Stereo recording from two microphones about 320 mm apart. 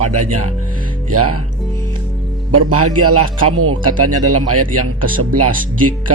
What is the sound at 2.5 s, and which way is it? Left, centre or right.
Speech, right.